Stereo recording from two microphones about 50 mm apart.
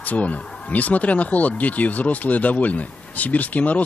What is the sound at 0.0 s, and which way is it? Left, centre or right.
Speech, left.